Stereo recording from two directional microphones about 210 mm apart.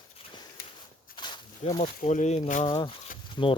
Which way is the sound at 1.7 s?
30° left (ahead or behind).